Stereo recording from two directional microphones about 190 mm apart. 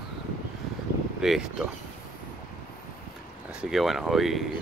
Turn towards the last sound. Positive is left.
turn(degrees=0)  # may be behind; listen again after turning